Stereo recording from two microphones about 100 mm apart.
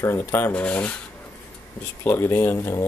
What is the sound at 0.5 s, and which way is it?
Speech, 15° left (ahead or behind).